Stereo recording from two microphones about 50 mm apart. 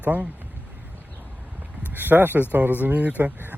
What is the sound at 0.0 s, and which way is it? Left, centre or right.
Speech, right.